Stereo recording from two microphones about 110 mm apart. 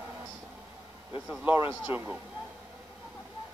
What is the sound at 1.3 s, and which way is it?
Speech, 15° right (ahead or behind).